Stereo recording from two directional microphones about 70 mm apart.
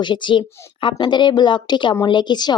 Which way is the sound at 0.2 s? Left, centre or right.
Left.